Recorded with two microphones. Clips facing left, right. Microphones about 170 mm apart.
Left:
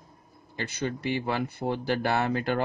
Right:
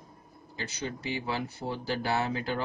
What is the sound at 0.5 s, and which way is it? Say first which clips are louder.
Speech: left 5 dB; 60° left (ahead or behind).